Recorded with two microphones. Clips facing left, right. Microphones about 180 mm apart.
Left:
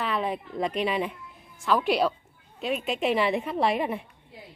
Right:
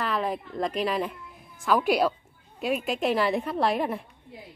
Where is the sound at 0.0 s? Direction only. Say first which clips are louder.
Even; centre (ahead or behind).